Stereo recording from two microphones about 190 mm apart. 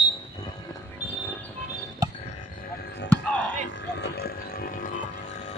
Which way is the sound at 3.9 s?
60° left (ahead or behind).